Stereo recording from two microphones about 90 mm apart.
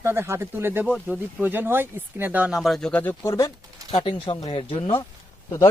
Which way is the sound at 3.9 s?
80° left.